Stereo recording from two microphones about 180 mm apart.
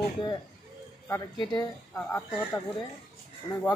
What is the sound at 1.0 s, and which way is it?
Speech, 15° left (ahead or behind).